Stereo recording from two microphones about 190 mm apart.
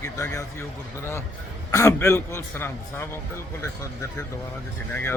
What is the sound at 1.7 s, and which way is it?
A man's voice, 15° left (ahead or behind).